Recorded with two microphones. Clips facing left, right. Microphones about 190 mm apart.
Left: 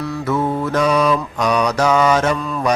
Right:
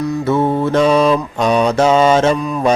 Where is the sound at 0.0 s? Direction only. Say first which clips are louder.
Right 4 dB; 25° right (ahead or behind).